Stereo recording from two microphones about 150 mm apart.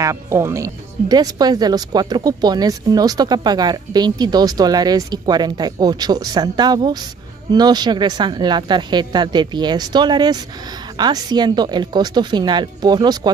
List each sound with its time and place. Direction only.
0.0 s speech: 20° right (ahead or behind)